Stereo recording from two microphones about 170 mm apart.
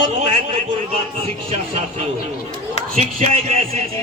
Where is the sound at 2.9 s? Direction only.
40° right (ahead or behind).